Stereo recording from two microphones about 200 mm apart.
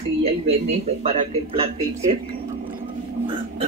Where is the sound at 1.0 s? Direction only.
30° right (ahead or behind).